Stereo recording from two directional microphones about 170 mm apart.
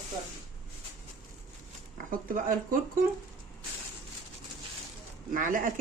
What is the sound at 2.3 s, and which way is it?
Speech, 55° right (ahead or behind).